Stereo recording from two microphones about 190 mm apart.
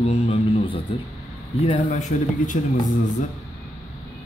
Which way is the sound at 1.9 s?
40° left (ahead or behind).